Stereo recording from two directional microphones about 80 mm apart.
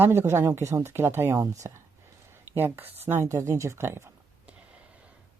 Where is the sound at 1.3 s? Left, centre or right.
Right.